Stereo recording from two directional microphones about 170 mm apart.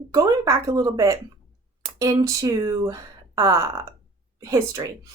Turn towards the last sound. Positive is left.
turn(degrees=-20)  # may be behind; listen again after turning